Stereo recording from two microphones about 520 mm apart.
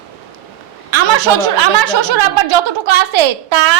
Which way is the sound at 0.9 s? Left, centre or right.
Right.